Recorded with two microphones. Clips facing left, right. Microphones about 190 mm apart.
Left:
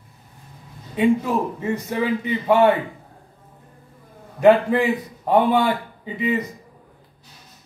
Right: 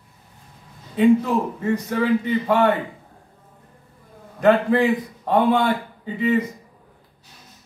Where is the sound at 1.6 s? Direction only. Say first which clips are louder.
Right 2 dB; 10° left (ahead or behind).